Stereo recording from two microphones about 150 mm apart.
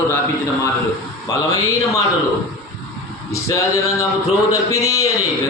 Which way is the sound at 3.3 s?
20° left (ahead or behind).